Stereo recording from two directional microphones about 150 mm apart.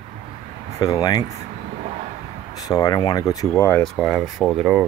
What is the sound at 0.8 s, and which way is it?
Speech, 25° left (ahead or behind).